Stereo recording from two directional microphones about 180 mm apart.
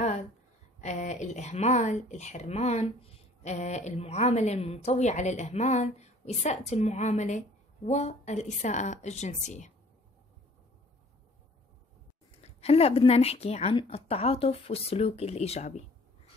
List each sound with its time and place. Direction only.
0.7 s a woman's voice: 40° left (ahead or behind)
12.4 s a woman's voice: 35° left (ahead or behind)